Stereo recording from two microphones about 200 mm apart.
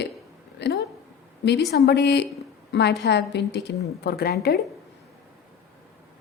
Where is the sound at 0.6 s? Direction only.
55° left (ahead or behind).